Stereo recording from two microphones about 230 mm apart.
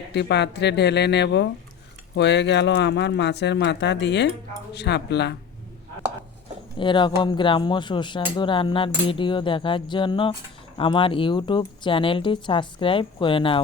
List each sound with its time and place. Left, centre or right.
0.1 s speech: left
6.7 s speech: left